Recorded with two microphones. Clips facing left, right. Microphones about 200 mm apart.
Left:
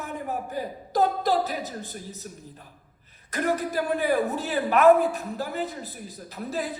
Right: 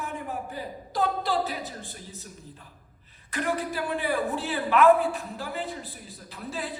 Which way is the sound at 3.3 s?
40° left (ahead or behind).